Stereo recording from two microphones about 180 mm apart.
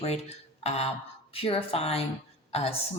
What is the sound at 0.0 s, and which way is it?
A woman's voice, 35° left (ahead or behind).